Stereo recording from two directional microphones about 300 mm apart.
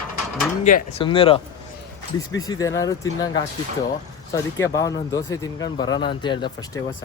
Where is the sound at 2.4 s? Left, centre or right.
Centre.